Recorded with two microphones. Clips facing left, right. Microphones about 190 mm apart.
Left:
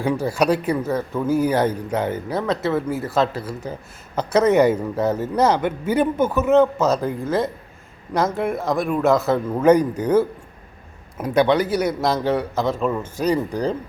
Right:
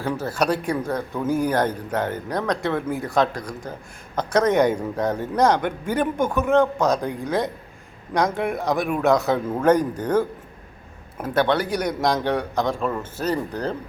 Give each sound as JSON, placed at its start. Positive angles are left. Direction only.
{"t": 0.0, "sound": "a man's voice", "side_deg": 10}